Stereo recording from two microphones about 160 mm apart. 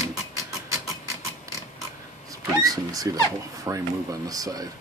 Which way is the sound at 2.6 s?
25° right (ahead or behind).